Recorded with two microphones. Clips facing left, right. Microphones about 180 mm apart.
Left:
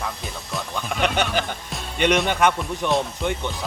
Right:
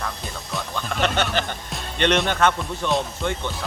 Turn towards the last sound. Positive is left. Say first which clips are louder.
# left 1 dB
turn(degrees=15)  # may be behind; listen again after turning